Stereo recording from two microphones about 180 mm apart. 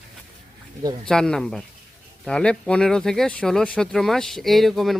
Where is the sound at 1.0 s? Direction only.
5° left (ahead or behind).